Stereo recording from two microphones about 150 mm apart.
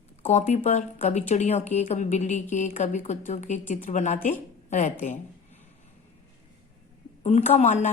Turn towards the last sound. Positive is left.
turn(degrees=50)  # may be behind; listen again after turning